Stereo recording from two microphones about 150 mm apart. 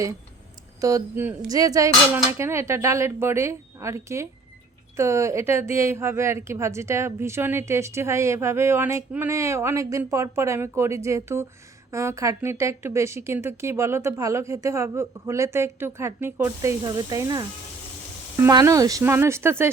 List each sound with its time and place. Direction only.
0.8 s a woman's voice: 20° right (ahead or behind)